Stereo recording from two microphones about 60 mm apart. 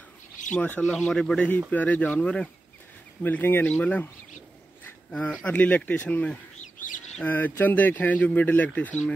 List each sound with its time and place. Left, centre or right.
0.5 s speech: left
0.8 s speech: centre
1.7 s speech: left
3.2 s speech: left
5.1 s speech: centre